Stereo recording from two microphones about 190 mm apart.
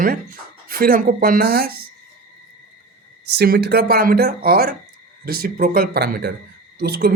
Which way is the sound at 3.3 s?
55° right (ahead or behind).